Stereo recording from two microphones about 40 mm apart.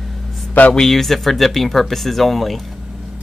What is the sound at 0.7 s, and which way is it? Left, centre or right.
Speech, centre.